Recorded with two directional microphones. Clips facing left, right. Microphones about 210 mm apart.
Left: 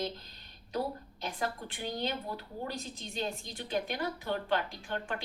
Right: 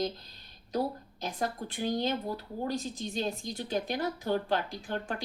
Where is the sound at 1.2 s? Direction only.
40° right (ahead or behind).